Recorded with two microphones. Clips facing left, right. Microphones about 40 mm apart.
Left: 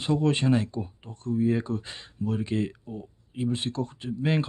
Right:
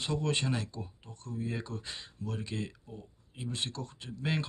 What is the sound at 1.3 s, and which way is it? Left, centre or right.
Speech, centre.